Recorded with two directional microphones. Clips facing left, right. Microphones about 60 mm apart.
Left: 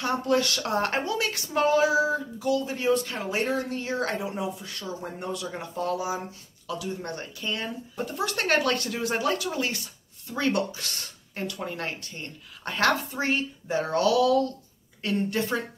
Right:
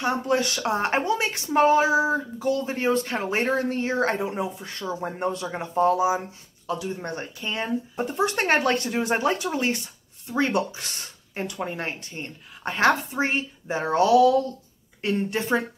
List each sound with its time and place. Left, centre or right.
0.0 s speech: right